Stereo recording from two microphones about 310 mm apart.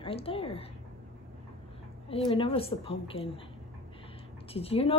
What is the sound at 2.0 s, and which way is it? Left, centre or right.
A woman's voice, centre.